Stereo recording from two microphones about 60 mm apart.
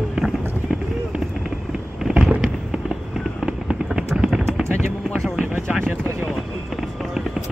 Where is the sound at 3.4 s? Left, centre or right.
Centre.